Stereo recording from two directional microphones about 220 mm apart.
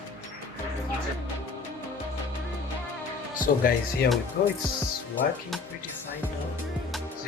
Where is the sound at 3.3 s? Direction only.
40° left (ahead or behind).